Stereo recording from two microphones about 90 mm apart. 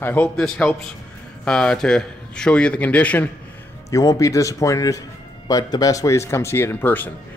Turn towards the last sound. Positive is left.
turn(degrees=20)  # may be behind; listen again after turning